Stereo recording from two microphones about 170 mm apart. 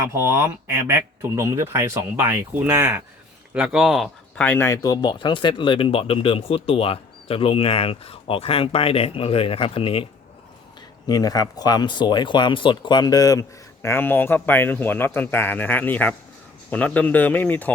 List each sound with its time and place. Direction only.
0.1 s speech: 15° right (ahead or behind)
4.4 s speech: 15° left (ahead or behind); by 10.1 s 30° left (ahead or behind)
11.0 s speech: 20° left (ahead or behind)